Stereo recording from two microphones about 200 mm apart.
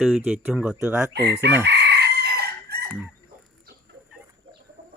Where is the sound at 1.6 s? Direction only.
60° right (ahead or behind).